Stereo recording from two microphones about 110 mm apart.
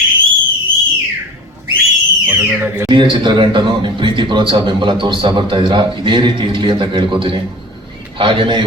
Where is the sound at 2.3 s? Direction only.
15° right (ahead or behind).